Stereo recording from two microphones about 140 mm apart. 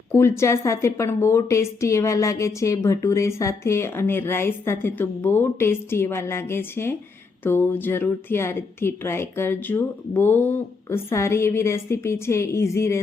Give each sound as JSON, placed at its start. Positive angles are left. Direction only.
{"t": 0.1, "sound": "a woman's voice", "side_deg": 20}